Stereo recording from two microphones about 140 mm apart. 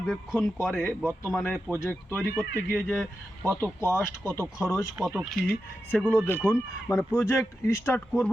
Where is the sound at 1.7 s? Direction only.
15° left (ahead or behind).